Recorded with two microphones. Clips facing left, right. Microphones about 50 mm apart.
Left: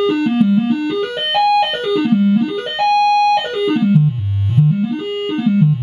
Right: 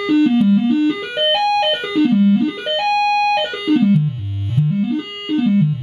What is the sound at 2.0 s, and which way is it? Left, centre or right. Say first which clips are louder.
Music: right 1 dB; centre.